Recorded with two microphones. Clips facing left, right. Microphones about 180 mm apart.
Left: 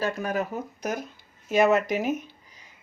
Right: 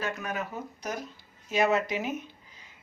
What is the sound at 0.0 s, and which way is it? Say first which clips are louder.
Speech: left 6 dB; 35° left (ahead or behind).